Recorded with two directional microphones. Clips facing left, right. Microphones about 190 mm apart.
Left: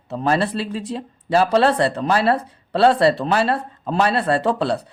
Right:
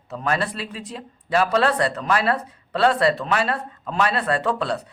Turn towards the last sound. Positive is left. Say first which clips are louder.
# left 4 dB
turn(degrees=30)  # may be behind; listen again after turning